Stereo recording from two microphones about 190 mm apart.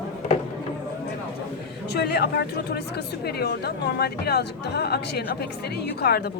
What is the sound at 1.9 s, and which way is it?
Speech, 60° left (ahead or behind).